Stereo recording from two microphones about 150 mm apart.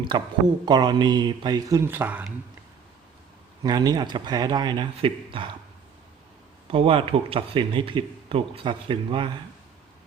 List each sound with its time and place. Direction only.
0.1 s speech: 30° right (ahead or behind); by 2.2 s 10° right (ahead or behind)
3.6 s speech: 25° right (ahead or behind)
6.7 s speech: 40° right (ahead or behind)